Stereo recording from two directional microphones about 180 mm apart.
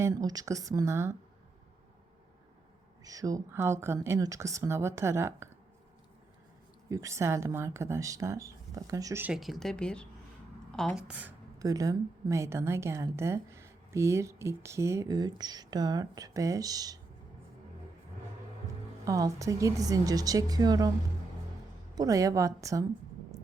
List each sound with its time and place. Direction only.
0.0 s a woman's voice: 20° right (ahead or behind)
3.0 s a woman's voice: 20° right (ahead or behind)
6.8 s a woman's voice: 20° right (ahead or behind)
11.6 s a woman's voice: 20° right (ahead or behind)
19.0 s a woman's voice: 20° right (ahead or behind)
21.9 s a woman's voice: 20° right (ahead or behind)